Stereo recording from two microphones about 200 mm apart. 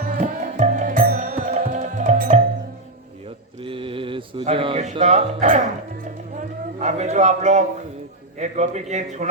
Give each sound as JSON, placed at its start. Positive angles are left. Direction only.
{"t": 0.0, "sound": "music", "side_deg": -45}
{"t": 3.6, "sound": "music", "side_deg": -25}
{"t": 6.3, "sound": "a sound", "side_deg": -35}
{"t": 8.4, "sound": "a man's voice", "side_deg": -35}